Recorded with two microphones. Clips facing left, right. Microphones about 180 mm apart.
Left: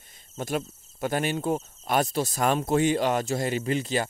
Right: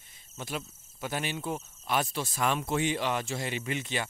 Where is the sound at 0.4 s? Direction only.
50° left (ahead or behind).